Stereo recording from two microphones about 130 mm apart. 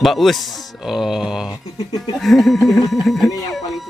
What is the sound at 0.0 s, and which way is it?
Speech, centre (ahead or behind).